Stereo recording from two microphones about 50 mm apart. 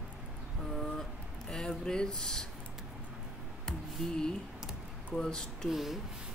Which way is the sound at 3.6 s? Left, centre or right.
Centre.